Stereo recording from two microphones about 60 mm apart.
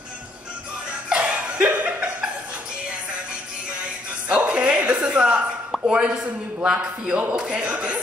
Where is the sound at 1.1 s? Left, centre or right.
Right.